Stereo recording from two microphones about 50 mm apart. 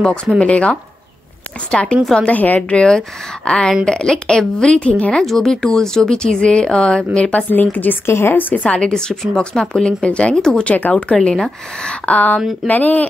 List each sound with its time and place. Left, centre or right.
0.0 s a woman's voice: centre
3.4 s speech: centre
5.2 s a woman's voice: centre; by 7.4 s left
7.5 s speech: left
8.1 s a woman's voice: left
8.4 s speech: left
8.6 s a woman's voice: centre; by 13.1 s left